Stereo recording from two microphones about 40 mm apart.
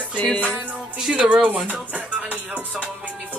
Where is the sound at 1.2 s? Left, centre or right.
Right.